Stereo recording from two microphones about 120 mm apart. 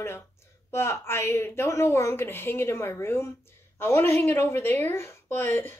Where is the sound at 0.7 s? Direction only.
20° left (ahead or behind).